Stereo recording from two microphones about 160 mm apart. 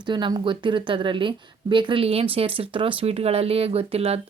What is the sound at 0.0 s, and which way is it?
A woman's voice, 30° right (ahead or behind).